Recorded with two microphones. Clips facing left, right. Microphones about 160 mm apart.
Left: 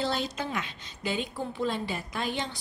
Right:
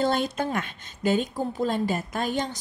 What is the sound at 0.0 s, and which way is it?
A woman's voice, 50° right (ahead or behind).